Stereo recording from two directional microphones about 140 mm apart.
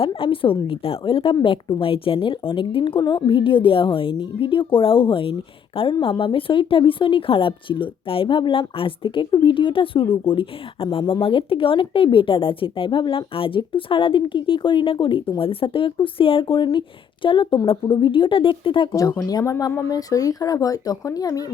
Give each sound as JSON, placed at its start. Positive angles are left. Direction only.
{"t": 0.0, "sound": "speech", "side_deg": 40}
{"t": 18.9, "sound": "speech", "side_deg": 20}